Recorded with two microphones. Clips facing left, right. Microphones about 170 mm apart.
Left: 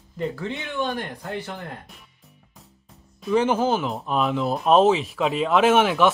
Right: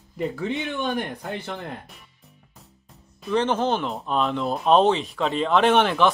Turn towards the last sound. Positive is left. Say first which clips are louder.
# left 1 dB
turn(degrees=5)  # may be behind; listen again after turning